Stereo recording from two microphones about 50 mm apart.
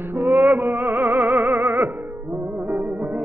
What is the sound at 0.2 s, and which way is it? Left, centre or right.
Music, right.